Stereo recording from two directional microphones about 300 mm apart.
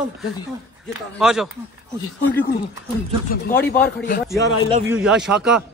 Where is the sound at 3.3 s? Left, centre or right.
Left.